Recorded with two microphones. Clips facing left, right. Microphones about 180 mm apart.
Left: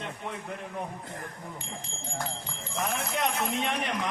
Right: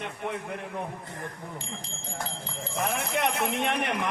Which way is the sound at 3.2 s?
60° right (ahead or behind).